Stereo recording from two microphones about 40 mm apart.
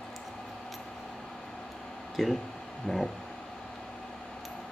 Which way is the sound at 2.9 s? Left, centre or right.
Left.